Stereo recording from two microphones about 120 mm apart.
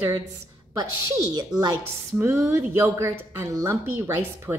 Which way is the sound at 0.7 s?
30° right (ahead or behind).